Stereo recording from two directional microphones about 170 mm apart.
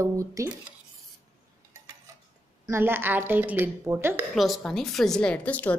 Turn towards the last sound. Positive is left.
turn(degrees=10)  # may be behind; listen again after turning